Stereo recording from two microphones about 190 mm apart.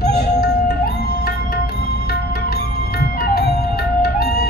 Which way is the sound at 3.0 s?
55° left (ahead or behind).